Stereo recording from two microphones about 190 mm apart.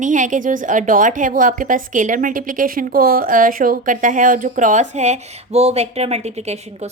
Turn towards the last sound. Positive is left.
turn(degrees=-35)  # may be behind; listen again after turning